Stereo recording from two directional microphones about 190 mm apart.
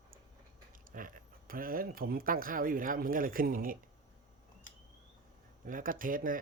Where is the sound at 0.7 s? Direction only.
45° right (ahead or behind).